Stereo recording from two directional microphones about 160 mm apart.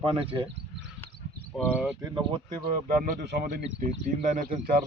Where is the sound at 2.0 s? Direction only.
30° right (ahead or behind).